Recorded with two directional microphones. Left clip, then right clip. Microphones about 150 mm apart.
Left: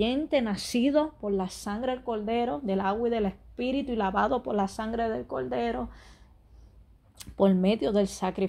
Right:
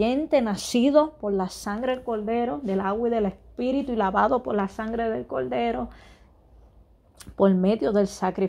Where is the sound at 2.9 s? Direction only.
20° right (ahead or behind).